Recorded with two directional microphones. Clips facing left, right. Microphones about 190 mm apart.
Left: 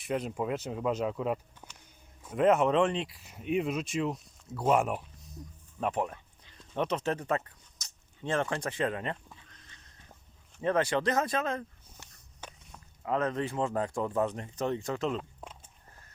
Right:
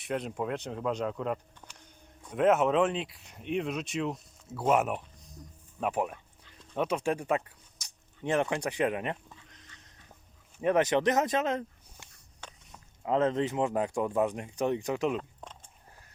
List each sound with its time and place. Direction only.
0.0 s speech: centre (ahead or behind)
1.6 s a sound: 10° left (ahead or behind)
2.2 s speech: centre (ahead or behind); by 12.0 s 20° right (ahead or behind)
13.1 s speech: 25° right (ahead or behind)
15.2 s speech: 5° left (ahead or behind)